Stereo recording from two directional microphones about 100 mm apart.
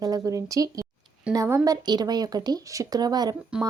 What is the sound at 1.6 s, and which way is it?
Speech, 45° right (ahead or behind).